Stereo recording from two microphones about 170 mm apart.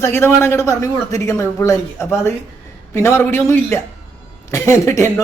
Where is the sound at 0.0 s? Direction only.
15° left (ahead or behind).